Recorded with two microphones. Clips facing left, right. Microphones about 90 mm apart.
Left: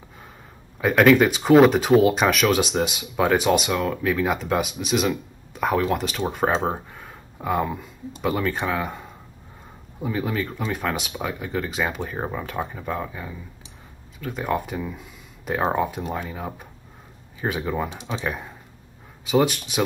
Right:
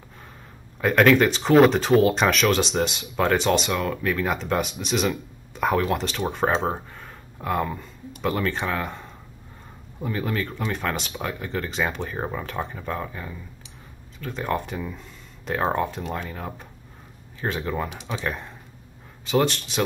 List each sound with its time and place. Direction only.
0.7 s speech: centre (ahead or behind)